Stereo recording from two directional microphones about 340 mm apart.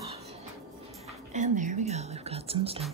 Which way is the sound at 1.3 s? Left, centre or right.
Right.